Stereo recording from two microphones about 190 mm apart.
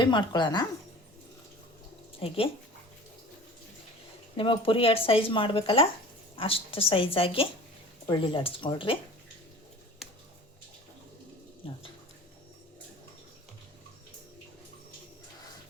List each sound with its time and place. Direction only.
0.0 s speech: 25° left (ahead or behind)
2.1 s speech: 30° left (ahead or behind)
4.4 s speech: 30° left (ahead or behind)
11.6 s speech: 30° left (ahead or behind)